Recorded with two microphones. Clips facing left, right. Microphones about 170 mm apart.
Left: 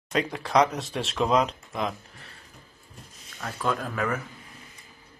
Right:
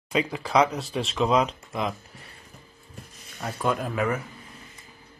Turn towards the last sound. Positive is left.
turn(degrees=-10)  # may be behind; listen again after turning